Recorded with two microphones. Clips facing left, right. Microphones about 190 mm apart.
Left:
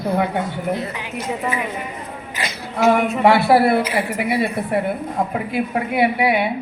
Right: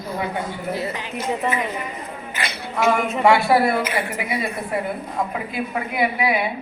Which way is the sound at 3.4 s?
60° left (ahead or behind).